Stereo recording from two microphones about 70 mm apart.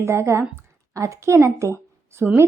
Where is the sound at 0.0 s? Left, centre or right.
Right.